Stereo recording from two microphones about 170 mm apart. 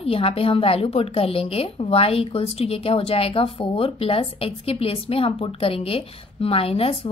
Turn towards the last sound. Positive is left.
turn(degrees=35)  # may be behind; listen again after turning